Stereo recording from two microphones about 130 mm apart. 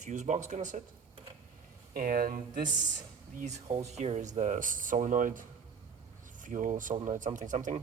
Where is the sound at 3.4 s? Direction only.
60° right (ahead or behind); by 7.0 s 90° right.